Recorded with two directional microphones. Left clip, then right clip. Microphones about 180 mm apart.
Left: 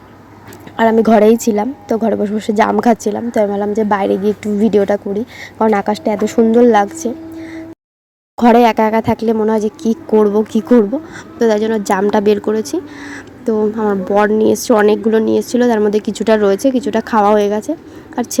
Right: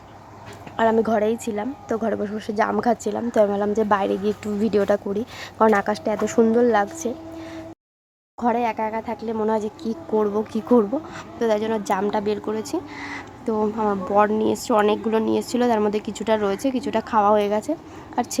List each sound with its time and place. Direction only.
0.8 s a woman's voice: 20° left (ahead or behind)
1.9 s a woman's voice: 15° left (ahead or behind)
8.4 s speech: 30° left (ahead or behind)
9.3 s a woman's voice: 20° left (ahead or behind)